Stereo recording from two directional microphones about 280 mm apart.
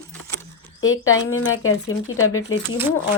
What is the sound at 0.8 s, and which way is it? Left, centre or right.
Speech, left.